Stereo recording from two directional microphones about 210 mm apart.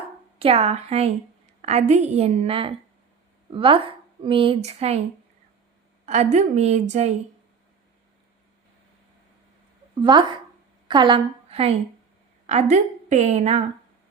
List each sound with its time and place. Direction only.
0.3 s a woman's voice: 30° right (ahead or behind)
6.1 s a woman's voice: 35° right (ahead or behind)
9.9 s a woman's voice: 20° right (ahead or behind)